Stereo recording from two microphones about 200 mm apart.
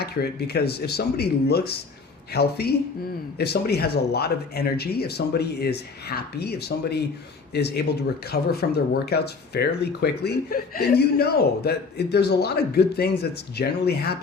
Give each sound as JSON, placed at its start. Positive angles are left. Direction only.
{"t": 0.0, "sound": "speech", "side_deg": 55}